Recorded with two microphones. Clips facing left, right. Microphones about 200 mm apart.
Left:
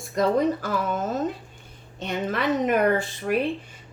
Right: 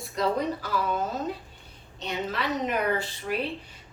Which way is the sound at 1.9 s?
50° left (ahead or behind).